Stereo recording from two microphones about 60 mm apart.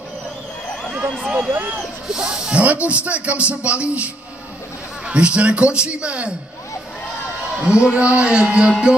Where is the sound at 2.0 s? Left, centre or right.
Centre.